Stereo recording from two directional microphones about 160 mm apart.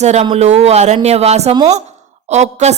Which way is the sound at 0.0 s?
45° right (ahead or behind).